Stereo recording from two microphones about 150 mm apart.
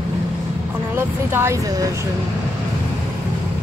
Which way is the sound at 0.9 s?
15° right (ahead or behind).